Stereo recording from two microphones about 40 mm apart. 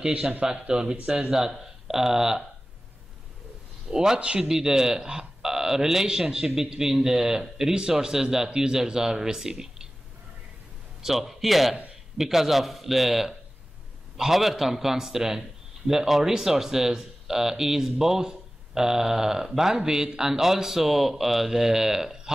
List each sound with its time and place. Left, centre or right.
0.0 s speech: right
1.3 s speech: centre
3.9 s speech: centre
11.0 s a man's voice: centre